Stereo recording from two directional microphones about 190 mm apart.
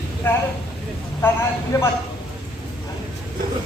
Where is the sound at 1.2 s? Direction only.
15° left (ahead or behind).